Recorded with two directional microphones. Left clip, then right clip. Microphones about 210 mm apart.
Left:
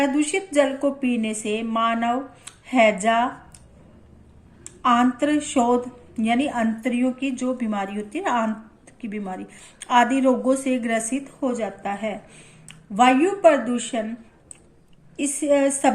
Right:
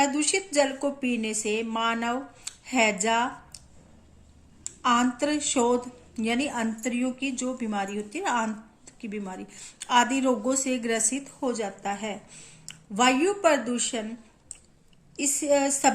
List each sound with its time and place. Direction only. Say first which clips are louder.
0.0 s a woman's voice: left 3 dB; 35° right (ahead or behind)
4.6 s a woman's voice: left 5 dB; 30° right (ahead or behind)
15.1 s a woman's voice: left 4 dB; 30° right (ahead or behind)